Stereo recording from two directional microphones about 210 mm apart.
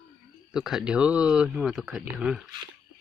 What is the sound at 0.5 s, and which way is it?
Speech, centre (ahead or behind).